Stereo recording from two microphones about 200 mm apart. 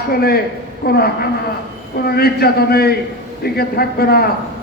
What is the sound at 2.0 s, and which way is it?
A man's voice, 50° left (ahead or behind).